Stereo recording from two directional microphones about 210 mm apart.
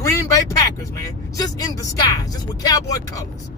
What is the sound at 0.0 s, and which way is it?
Speech, 15° left (ahead or behind).